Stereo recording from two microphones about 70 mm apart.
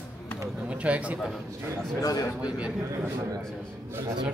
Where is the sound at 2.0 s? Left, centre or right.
Left.